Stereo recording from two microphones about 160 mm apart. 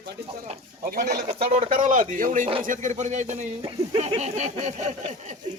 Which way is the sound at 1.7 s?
55° right (ahead or behind).